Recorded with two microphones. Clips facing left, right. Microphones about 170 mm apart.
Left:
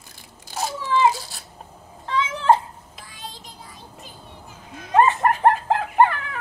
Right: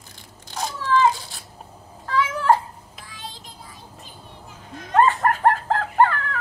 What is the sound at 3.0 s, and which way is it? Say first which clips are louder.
Child singing: even; centre (ahead or behind).